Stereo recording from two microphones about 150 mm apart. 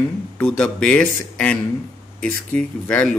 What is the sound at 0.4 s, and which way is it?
Speech, 5° left (ahead or behind).